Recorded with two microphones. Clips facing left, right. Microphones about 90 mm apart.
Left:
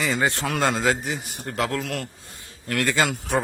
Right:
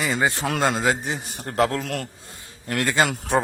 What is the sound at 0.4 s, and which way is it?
A man's voice, 30° right (ahead or behind).